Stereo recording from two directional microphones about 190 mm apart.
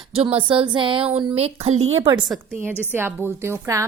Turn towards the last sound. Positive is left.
turn(degrees=-15)  # may be behind; listen again after turning